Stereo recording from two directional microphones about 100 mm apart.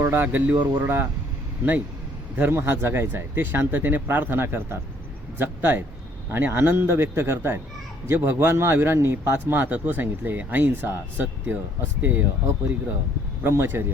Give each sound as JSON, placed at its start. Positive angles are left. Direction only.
{"t": 0.0, "sound": "a man's voice", "side_deg": -25}
{"t": 2.3, "sound": "a man's voice", "side_deg": -20}